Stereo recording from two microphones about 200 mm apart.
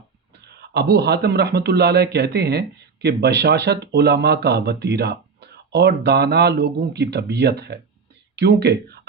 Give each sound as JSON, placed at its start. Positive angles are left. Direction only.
{"t": 0.4, "sound": "speech", "side_deg": -55}